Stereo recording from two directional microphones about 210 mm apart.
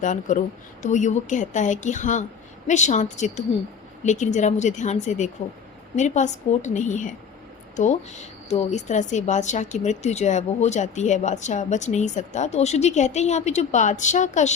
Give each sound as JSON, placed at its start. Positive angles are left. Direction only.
{"t": 0.0, "sound": "speech", "side_deg": 35}
{"t": 8.4, "sound": "speech", "side_deg": 30}